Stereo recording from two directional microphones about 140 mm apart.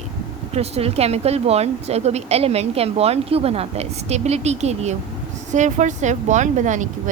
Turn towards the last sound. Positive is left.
turn(degrees=-60)  # may be behind; listen again after turning